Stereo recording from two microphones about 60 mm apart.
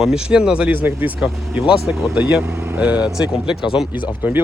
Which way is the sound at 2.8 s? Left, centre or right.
Right.